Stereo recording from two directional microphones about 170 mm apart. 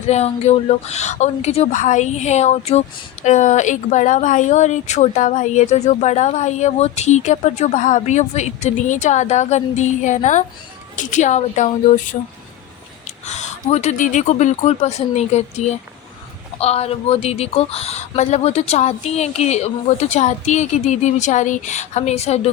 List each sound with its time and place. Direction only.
0.1 s a woman's voice: 40° left (ahead or behind)